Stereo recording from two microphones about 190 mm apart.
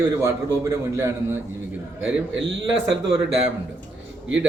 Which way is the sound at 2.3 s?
75° right (ahead or behind).